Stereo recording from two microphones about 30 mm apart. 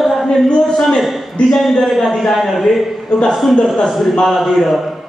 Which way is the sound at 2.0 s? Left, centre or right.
Centre.